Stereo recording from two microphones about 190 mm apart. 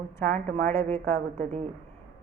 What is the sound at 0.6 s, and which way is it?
Speech, 10° left (ahead or behind).